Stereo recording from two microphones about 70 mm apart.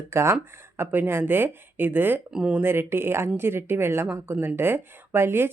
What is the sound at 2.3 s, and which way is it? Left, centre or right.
Speech, centre.